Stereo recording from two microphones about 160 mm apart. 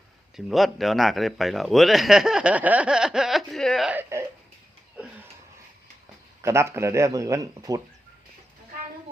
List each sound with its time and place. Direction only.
0.3 s a man's voice: centre (ahead or behind)
3.9 s speech: 15° right (ahead or behind)
6.4 s speech: 15° right (ahead or behind)